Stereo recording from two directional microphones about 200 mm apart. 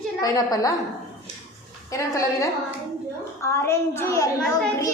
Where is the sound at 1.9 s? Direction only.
15° left (ahead or behind).